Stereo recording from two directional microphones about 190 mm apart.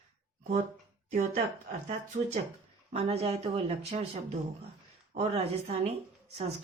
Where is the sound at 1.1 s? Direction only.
40° right (ahead or behind).